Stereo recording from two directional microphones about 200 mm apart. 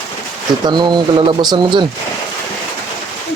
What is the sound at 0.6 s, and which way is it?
Speech, 20° right (ahead or behind).